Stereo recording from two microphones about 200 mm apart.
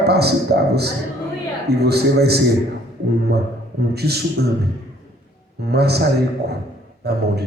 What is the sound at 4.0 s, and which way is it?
Speech, 55° right (ahead or behind).